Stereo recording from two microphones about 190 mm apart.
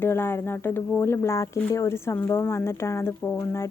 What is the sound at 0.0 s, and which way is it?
Speech, 10° left (ahead or behind).